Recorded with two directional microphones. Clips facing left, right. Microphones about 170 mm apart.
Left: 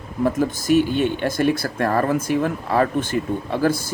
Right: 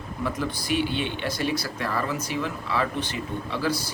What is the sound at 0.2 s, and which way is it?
Speech, 45° left (ahead or behind).